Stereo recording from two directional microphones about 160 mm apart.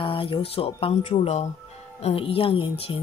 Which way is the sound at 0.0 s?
35° left (ahead or behind).